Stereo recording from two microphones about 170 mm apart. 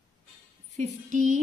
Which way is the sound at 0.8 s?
45° right (ahead or behind).